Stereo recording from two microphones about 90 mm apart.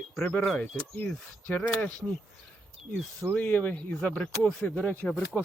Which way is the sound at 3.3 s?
15° left (ahead or behind).